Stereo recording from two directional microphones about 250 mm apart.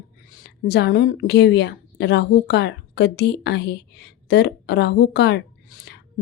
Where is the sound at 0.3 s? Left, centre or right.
Left.